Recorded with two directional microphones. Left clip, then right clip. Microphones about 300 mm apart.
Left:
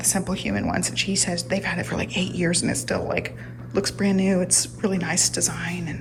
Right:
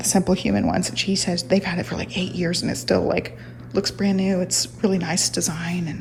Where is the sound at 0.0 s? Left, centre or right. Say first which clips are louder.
Right 5 dB; centre.